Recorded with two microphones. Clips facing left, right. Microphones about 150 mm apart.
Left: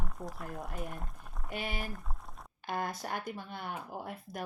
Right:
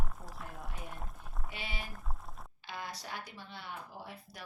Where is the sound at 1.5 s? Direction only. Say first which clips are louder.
Left 7 dB; 50° left (ahead or behind).